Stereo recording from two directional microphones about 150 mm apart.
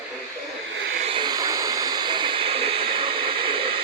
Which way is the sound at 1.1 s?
25° right (ahead or behind).